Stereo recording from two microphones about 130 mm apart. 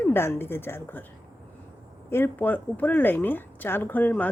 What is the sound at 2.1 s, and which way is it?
A woman's voice, 15° left (ahead or behind).